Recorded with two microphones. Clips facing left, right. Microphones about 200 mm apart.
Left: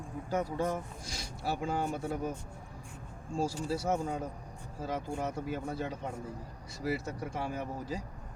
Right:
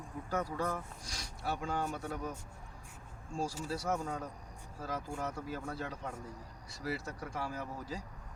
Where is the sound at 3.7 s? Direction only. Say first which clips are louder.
Left 4 dB; 25° left (ahead or behind).